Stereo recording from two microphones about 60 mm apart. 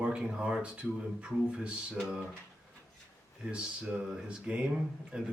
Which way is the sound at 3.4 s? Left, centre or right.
Centre.